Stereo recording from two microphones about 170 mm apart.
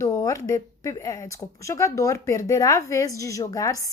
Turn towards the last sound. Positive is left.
turn(degrees=20)  # may be behind; listen again after turning